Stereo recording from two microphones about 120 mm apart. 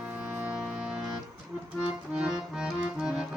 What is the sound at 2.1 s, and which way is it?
Accordion, 5° right (ahead or behind).